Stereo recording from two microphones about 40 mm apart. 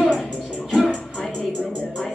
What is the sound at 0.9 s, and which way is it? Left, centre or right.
Music, centre.